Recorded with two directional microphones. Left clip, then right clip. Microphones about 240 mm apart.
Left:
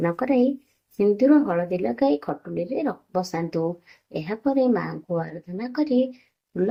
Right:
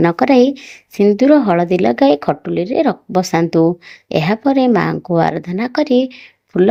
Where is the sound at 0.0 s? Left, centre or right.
Right.